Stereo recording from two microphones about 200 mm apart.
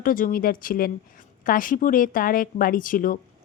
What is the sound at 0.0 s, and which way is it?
A woman's voice, 45° left (ahead or behind).